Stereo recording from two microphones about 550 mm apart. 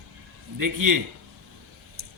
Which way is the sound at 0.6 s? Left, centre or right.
Right.